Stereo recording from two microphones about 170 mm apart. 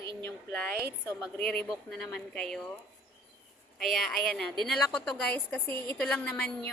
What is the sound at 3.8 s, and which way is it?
A woman's voice, 5° left (ahead or behind).